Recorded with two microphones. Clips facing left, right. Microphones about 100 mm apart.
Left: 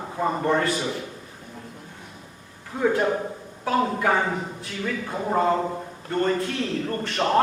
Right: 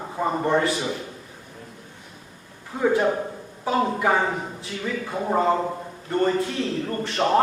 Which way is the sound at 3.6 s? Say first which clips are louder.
Right 1 dB; 10° right (ahead or behind).